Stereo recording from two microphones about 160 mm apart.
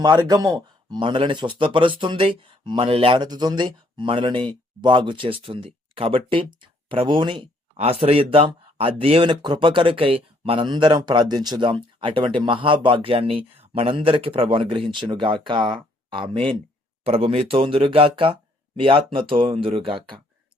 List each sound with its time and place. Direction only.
0.0 s speech: 25° right (ahead or behind)